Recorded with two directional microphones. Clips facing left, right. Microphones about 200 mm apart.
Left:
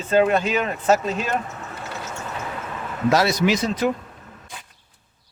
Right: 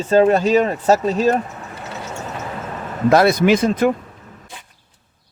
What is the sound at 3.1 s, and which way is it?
Speech, 55° right (ahead or behind).